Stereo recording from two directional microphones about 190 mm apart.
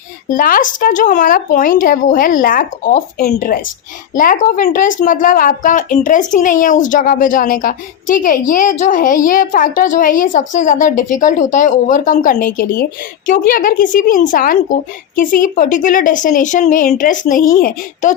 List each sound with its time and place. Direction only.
0.3 s a woman's voice: 45° left (ahead or behind)